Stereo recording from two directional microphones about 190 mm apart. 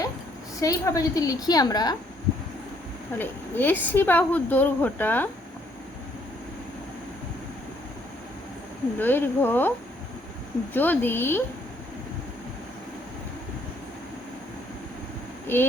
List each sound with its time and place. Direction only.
0.6 s a woman's voice: 20° left (ahead or behind)
3.2 s a woman's voice: 10° left (ahead or behind)
9.0 s a woman's voice: 10° left (ahead or behind)
10.8 s a woman's voice: 10° left (ahead or behind)
15.5 s a woman's voice: 10° left (ahead or behind)